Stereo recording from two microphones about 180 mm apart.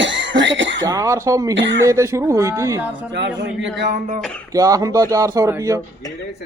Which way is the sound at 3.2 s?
80° right.